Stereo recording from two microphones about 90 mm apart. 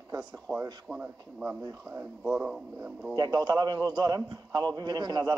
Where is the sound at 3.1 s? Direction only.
50° right (ahead or behind).